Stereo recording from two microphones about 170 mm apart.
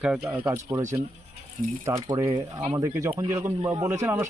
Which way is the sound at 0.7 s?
20° right (ahead or behind).